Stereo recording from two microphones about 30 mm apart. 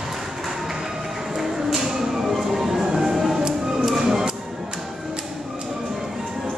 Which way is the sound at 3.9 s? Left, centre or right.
Centre.